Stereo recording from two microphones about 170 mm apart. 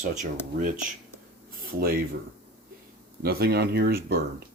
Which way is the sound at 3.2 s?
65° right (ahead or behind).